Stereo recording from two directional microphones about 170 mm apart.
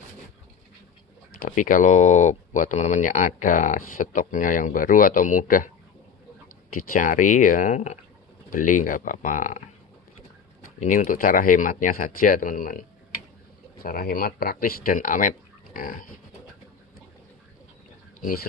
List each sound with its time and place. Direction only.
1.4 s speech: 50° left (ahead or behind)
6.7 s speech: 50° left (ahead or behind)
10.8 s speech: 50° left (ahead or behind)
13.8 s speech: 60° left (ahead or behind)